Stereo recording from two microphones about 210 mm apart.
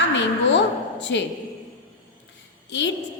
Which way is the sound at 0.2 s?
55° left (ahead or behind).